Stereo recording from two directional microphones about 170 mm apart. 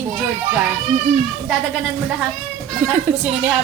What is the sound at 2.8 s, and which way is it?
Speech, 5° right (ahead or behind).